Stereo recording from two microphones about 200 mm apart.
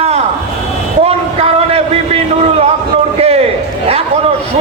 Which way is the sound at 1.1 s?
30° right (ahead or behind).